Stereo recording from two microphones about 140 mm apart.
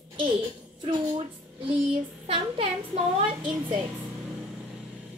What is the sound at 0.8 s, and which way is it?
Speech, 35° right (ahead or behind).